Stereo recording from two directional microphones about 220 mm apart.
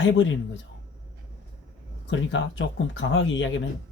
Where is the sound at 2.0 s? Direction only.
55° left (ahead or behind).